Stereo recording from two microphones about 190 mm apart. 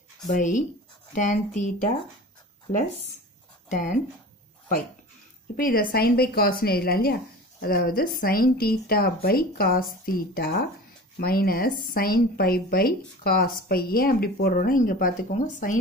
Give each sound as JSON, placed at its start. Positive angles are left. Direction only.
{"t": 0.3, "sound": "speech", "side_deg": 40}
{"t": 3.7, "sound": "speech", "side_deg": 40}
{"t": 5.6, "sound": "speech", "side_deg": 50}